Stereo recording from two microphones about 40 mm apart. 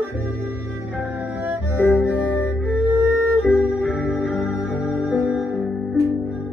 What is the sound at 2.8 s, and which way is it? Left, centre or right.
Music, right.